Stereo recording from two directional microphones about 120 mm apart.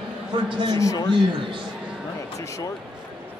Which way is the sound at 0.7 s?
25° left (ahead or behind).